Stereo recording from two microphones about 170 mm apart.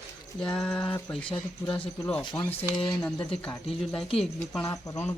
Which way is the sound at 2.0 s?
5° left (ahead or behind).